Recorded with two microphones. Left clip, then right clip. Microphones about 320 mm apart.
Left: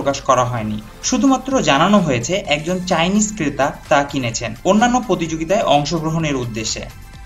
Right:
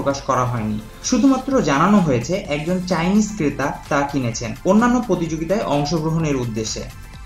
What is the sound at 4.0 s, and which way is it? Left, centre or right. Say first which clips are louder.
Speech: left 2 dB; left.